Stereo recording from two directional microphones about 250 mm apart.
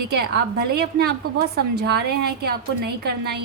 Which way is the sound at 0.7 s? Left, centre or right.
Right.